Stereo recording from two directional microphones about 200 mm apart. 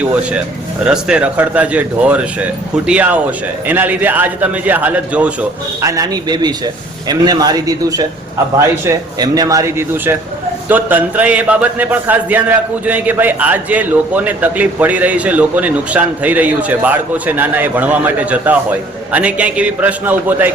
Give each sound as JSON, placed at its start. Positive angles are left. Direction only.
{"t": 0.0, "sound": "a man's voice", "side_deg": -5}